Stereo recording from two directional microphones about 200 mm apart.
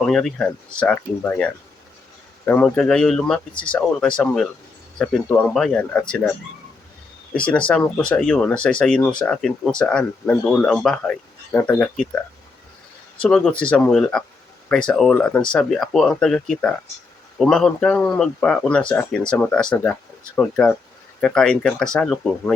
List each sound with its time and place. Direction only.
0.0 s speech: 5° left (ahead or behind)
2.5 s speech: 5° left (ahead or behind)
7.3 s speech: 5° left (ahead or behind)
13.2 s speech: 5° left (ahead or behind)